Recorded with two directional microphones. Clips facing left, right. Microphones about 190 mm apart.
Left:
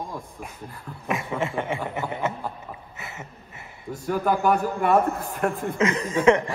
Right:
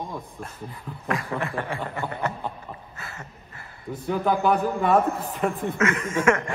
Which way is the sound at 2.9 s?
20° left (ahead or behind).